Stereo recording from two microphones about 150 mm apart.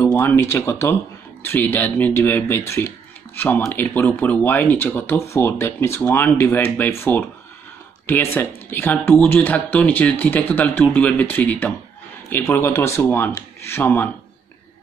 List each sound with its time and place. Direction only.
0.0 s speech: 15° left (ahead or behind)